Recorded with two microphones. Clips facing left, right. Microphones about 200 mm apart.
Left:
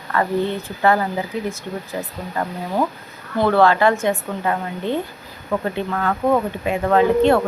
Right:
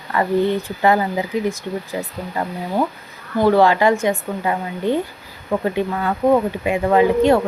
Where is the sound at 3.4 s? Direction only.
15° right (ahead or behind).